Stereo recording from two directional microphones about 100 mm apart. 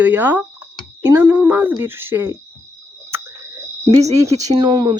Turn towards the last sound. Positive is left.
turn(degrees=-50)  # may be behind; listen again after turning